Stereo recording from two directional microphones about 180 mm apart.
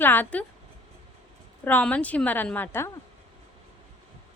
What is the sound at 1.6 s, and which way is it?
A woman's voice, 10° left (ahead or behind).